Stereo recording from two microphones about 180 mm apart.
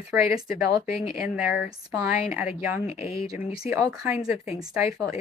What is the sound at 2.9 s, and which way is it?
Speech, 35° left (ahead or behind).